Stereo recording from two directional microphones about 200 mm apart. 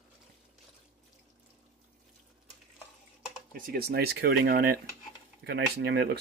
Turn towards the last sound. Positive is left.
turn(degrees=-55)  # may be behind; listen again after turning